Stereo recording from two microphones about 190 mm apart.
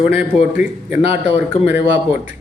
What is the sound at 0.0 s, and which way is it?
Speech, 5° right (ahead or behind).